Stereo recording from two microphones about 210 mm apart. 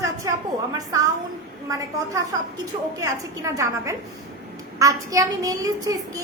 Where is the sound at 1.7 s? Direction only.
15° right (ahead or behind).